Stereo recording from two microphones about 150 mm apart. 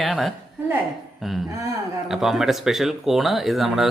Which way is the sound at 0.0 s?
Centre (ahead or behind).